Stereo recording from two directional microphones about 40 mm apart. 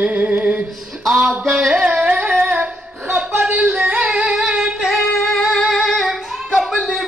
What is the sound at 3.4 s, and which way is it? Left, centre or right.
Yodeling, right.